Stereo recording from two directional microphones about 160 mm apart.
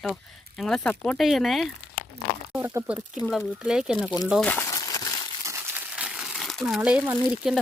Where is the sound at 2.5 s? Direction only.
10° right (ahead or behind).